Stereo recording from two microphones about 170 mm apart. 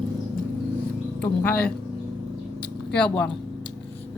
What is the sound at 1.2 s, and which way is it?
Speech, 10° left (ahead or behind).